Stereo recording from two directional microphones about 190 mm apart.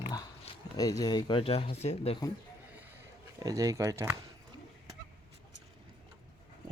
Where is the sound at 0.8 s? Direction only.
20° left (ahead or behind); by 2.1 s 35° left (ahead or behind).